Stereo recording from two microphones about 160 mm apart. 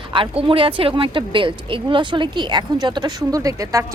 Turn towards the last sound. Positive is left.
turn(degrees=-20)  # may be behind; listen again after turning